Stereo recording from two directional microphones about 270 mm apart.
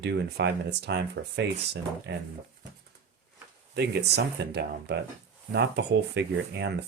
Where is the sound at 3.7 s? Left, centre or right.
Right.